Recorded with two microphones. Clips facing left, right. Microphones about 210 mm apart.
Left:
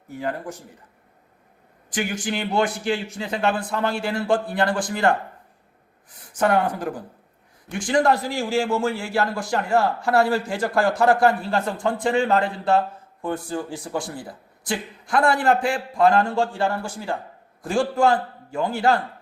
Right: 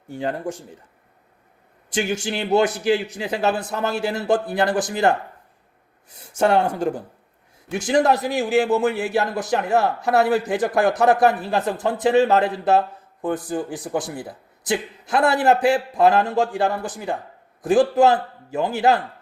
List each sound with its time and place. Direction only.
0.1 s a man's voice: 30° right (ahead or behind)
1.9 s a man's voice: 25° right (ahead or behind)
6.3 s a man's voice: 25° right (ahead or behind)